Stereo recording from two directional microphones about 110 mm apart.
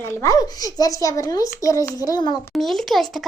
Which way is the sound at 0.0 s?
30° left (ahead or behind).